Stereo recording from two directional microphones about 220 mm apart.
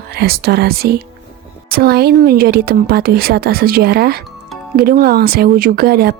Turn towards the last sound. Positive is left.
turn(degrees=-45)  # may be behind; listen again after turning